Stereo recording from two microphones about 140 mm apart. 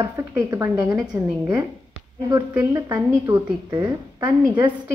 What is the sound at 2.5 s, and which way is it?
A woman's voice, 20° right (ahead or behind).